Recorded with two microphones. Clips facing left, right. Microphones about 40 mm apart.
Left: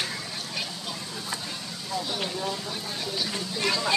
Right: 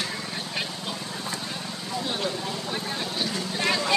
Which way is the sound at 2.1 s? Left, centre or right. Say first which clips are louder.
Right 1 dB; centre.